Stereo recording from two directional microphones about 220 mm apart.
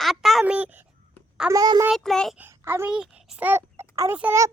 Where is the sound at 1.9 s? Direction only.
Centre (ahead or behind).